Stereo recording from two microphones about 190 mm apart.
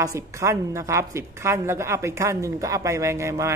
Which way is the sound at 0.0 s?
15° right (ahead or behind).